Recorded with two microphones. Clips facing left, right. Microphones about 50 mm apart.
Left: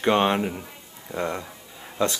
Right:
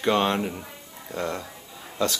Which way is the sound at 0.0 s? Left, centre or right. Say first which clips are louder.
Left 2 dB; centre.